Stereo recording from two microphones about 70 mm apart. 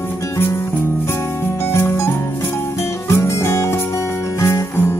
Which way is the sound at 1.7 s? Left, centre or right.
Left.